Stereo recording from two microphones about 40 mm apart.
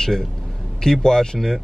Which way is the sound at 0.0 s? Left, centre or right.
Centre.